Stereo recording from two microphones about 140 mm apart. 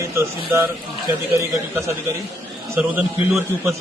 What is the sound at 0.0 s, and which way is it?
A man's voice, 20° right (ahead or behind).